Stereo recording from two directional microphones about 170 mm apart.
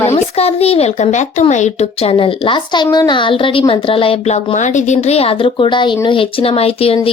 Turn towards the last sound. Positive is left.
turn(degrees=35)  # may be behind; listen again after turning